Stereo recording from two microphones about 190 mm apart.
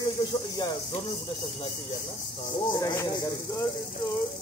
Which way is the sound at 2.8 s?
15° left (ahead or behind).